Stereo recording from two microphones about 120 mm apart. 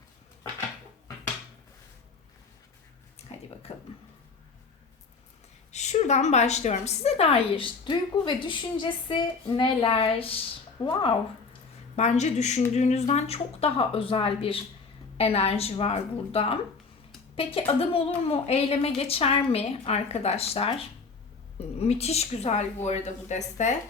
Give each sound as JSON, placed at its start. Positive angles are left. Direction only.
{"t": 3.3, "sound": "a sound", "side_deg": 55}
{"t": 3.7, "sound": "a woman's voice", "side_deg": 55}
{"t": 5.7, "sound": "a woman's voice", "side_deg": 70}
{"t": 11.9, "sound": "a woman's voice", "side_deg": 70}